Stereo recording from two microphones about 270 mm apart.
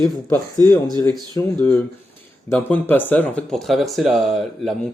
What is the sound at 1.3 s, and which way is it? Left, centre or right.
Speech, centre.